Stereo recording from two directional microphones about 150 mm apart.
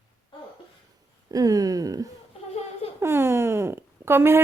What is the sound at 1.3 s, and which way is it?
Speech, 25° right (ahead or behind).